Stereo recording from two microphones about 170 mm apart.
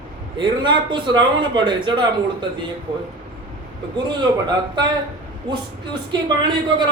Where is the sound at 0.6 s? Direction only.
25° right (ahead or behind).